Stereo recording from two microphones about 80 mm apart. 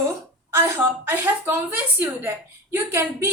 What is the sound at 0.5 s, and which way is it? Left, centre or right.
A woman's voice, right.